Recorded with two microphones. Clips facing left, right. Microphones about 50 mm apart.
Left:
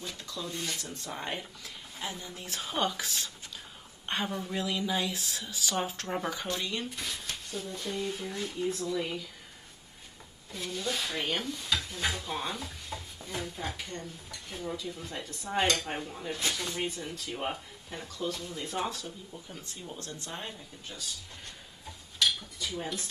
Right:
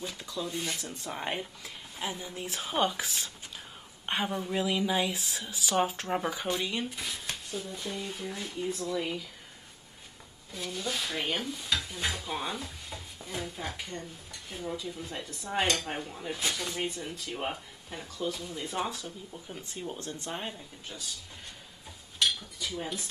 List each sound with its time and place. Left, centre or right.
0.0 s speech: centre
10.5 s speech: centre
19.4 s speech: centre
20.9 s speech: centre
22.6 s dishes: centre